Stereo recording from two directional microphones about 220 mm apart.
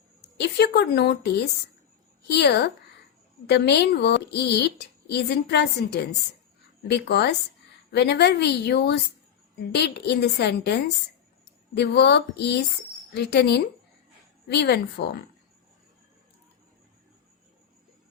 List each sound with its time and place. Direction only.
0.3 s a woman's voice: 50° left (ahead or behind)